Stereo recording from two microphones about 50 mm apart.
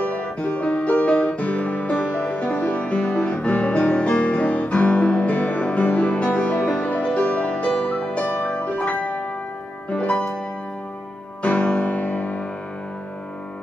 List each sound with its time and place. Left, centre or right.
0.0 s music: left
11.4 s music: left